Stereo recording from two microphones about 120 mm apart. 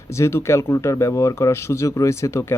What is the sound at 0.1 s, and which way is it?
Speech, 25° left (ahead or behind).